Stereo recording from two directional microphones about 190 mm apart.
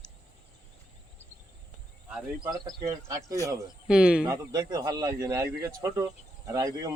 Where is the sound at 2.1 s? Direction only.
5° right (ahead or behind).